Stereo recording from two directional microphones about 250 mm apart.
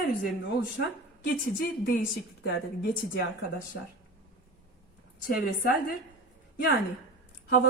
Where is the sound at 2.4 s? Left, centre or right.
Left.